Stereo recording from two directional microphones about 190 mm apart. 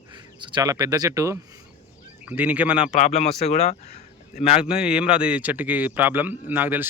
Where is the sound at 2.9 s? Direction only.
35° left (ahead or behind).